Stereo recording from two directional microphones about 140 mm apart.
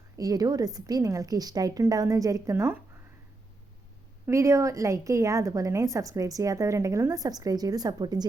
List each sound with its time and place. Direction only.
0.2 s a woman's voice: 25° right (ahead or behind)
4.3 s a woman's voice: 20° right (ahead or behind)